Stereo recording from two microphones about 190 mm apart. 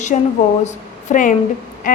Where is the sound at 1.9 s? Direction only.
45° left (ahead or behind).